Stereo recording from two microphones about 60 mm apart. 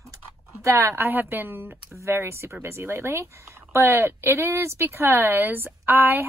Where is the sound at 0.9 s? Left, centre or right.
Right.